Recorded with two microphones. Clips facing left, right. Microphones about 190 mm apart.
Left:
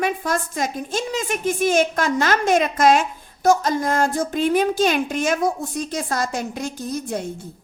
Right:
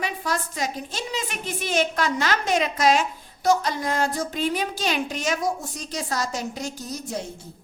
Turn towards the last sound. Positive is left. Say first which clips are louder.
# left 5 dB
turn(degrees=55)  # may be behind; listen again after turning